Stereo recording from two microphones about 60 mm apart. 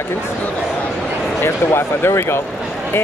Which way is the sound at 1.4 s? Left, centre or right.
Left.